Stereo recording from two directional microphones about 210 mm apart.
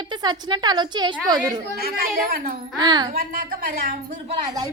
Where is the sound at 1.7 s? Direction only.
45° right (ahead or behind).